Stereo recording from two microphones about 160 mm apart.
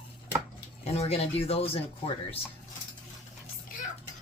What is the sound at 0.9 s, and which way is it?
Speech, 40° left (ahead or behind).